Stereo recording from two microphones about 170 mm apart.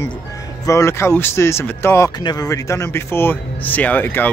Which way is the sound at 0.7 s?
15° left (ahead or behind).